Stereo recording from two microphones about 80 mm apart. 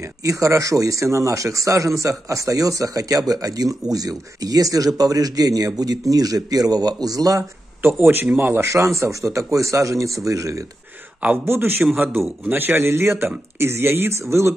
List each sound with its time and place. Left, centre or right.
0.0 s speech: right
7.8 s speech: right
11.1 s a man's voice: centre